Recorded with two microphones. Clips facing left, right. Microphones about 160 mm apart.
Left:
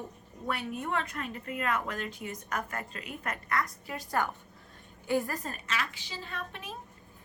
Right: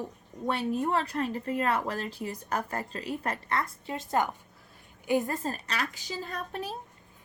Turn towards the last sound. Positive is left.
turn(degrees=-40)  # may be behind; listen again after turning